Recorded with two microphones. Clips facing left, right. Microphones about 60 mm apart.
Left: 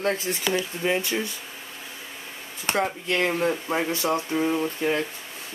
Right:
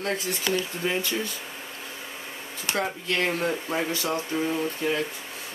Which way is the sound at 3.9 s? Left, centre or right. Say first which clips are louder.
Left 3 dB; left.